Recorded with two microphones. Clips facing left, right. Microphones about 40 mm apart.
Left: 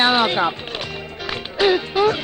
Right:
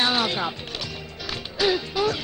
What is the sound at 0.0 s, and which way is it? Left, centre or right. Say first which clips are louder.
Speech: left 6 dB; left.